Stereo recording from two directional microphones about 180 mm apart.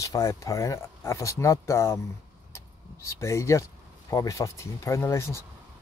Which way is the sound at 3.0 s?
15° left (ahead or behind).